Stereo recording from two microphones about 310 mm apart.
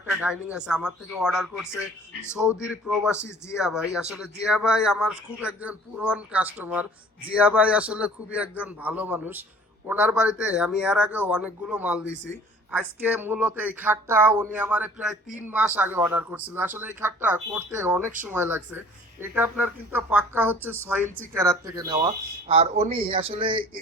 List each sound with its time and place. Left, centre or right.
0.2 s speech: centre